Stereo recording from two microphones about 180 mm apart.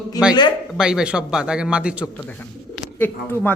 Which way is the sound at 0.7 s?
5° right (ahead or behind).